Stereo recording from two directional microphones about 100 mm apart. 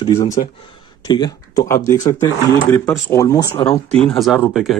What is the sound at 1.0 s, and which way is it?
Speech, 45° left (ahead or behind).